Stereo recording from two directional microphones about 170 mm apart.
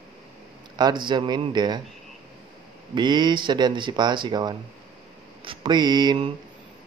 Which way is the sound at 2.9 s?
25° right (ahead or behind).